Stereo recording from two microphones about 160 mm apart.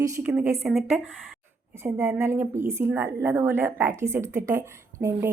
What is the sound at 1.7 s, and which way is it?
A woman's voice, 15° right (ahead or behind).